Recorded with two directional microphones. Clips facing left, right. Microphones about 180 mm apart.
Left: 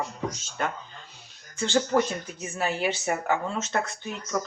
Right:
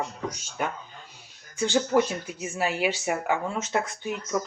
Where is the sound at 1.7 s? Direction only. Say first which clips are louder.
Even; 5° right (ahead or behind).